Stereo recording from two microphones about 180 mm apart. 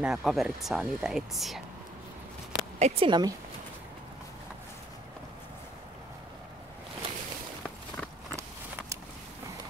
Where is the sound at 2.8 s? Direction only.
30° right (ahead or behind).